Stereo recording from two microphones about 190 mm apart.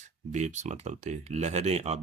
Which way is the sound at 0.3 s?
40° right (ahead or behind).